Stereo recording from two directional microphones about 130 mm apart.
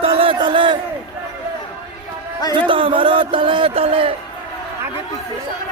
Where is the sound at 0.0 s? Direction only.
45° right (ahead or behind).